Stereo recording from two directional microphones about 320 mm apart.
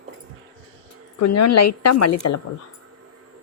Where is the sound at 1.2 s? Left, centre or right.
Left.